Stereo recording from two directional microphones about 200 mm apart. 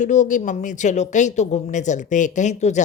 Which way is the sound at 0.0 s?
35° left (ahead or behind).